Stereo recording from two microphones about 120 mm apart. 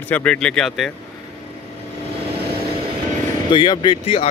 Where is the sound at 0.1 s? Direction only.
10° left (ahead or behind).